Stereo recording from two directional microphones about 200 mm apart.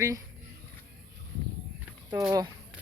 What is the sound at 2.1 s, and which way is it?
Speech, 10° right (ahead or behind).